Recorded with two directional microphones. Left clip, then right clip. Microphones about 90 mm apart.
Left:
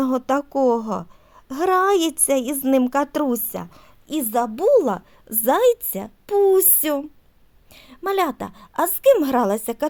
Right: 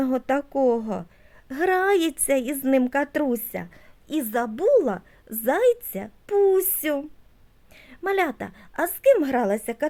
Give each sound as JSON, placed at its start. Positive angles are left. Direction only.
{"t": 0.0, "sound": "speech", "side_deg": 35}
{"t": 4.7, "sound": "a woman's voice", "side_deg": 55}
{"t": 7.7, "sound": "a woman's voice", "side_deg": 45}
{"t": 9.1, "sound": "a woman's voice", "side_deg": 50}